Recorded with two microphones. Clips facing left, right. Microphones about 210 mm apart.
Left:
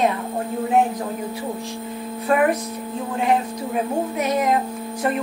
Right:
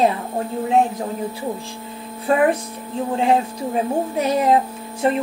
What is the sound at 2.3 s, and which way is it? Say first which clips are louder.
A woman's voice: right 2 dB; 25° right (ahead or behind).